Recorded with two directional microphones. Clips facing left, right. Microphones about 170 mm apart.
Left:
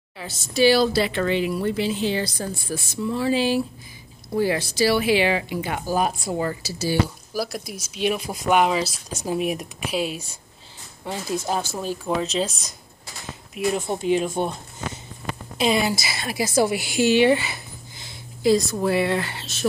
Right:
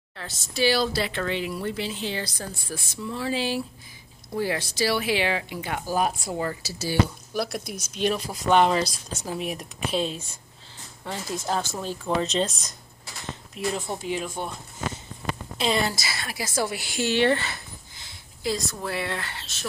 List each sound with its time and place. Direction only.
0.2 s speech: 10° left (ahead or behind)
6.6 s speech: 5° left (ahead or behind)
13.6 s speech: 15° left (ahead or behind)
15.5 s a woman's voice: 10° left (ahead or behind)